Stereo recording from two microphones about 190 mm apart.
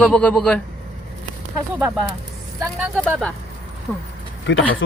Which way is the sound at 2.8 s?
Centre (ahead or behind).